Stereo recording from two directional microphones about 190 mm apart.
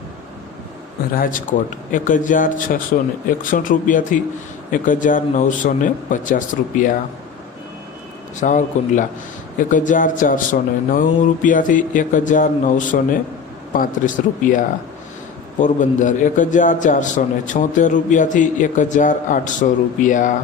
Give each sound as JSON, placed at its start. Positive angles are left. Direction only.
{"t": 1.1, "sound": "speech", "side_deg": 45}
{"t": 8.4, "sound": "a man's voice", "side_deg": 40}